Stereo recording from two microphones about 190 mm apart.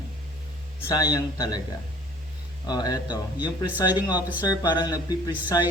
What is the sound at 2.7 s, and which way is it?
Speech, 20° left (ahead or behind).